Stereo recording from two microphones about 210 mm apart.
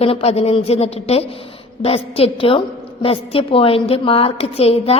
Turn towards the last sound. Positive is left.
turn(degrees=30)  # may be behind; listen again after turning